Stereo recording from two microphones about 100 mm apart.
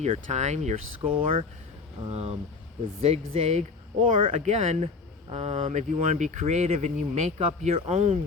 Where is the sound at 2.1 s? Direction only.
90° right.